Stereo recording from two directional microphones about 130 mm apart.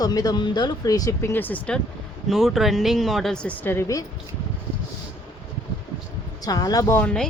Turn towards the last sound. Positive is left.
turn(degrees=10)  # may be behind; listen again after turning